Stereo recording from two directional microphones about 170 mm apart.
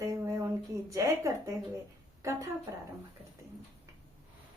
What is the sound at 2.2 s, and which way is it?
Speech, 20° right (ahead or behind).